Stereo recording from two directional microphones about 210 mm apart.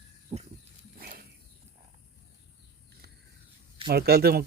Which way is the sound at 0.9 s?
45° right (ahead or behind).